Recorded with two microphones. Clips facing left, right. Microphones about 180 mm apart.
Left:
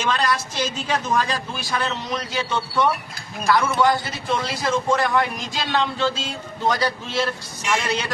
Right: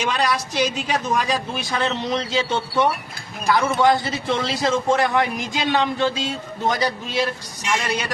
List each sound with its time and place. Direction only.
0.0 s a man's voice: 15° right (ahead or behind)